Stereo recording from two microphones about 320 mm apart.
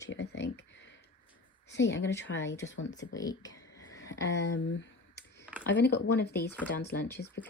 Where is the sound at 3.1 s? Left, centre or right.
Centre.